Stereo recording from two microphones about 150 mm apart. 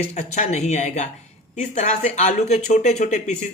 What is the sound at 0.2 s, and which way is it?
Speech, 50° left (ahead or behind).